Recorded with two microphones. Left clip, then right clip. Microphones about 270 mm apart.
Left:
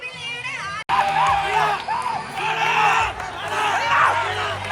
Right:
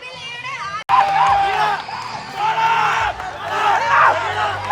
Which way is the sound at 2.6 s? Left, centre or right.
Centre.